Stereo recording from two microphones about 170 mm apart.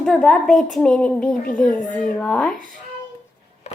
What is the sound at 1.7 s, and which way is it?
Speech, 50° left (ahead or behind).